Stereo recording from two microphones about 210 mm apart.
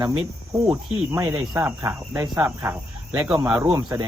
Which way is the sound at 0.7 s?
15° right (ahead or behind).